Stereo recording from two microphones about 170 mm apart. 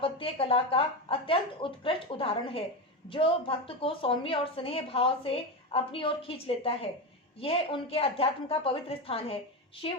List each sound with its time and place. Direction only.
0.0 s a woman's voice: 35° left (ahead or behind)